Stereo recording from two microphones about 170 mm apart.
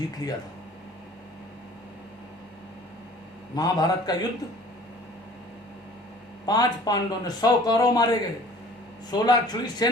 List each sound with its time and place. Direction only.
0.2 s speech: 20° left (ahead or behind)
3.5 s speech: 25° left (ahead or behind)
6.4 s speech: 25° left (ahead or behind)